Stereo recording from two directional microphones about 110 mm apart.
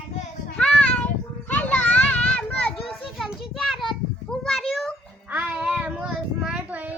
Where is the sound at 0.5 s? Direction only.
10° left (ahead or behind).